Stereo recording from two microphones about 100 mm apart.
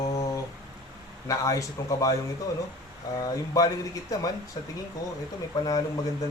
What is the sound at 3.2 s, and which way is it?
Mantra, 35° left (ahead or behind).